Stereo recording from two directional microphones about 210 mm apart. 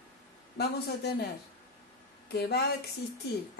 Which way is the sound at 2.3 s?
50° left (ahead or behind).